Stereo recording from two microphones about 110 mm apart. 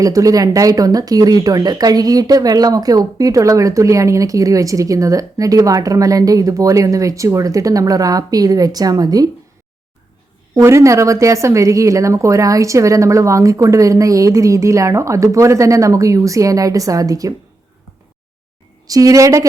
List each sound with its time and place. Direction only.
0.0 s speech: 30° right (ahead or behind)
10.5 s a woman's voice: 25° right (ahead or behind)
18.9 s speech: 30° right (ahead or behind)